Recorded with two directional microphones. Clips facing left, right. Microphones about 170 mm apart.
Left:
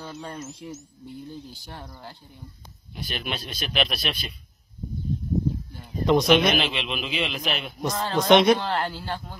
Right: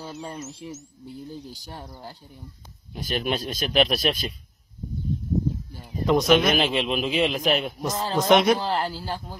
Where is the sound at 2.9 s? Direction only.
45° right (ahead or behind).